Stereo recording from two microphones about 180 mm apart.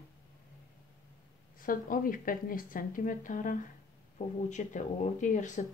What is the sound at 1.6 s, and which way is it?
Speech, 50° left (ahead or behind).